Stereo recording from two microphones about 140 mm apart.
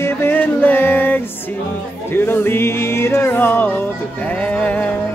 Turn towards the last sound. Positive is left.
turn(degrees=10)  # may be behind; listen again after turning